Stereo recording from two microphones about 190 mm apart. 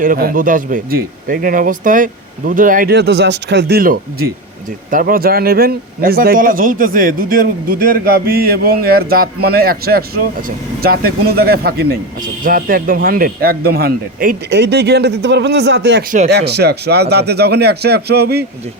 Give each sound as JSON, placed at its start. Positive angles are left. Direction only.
{"t": 0.0, "sound": "speech", "side_deg": -50}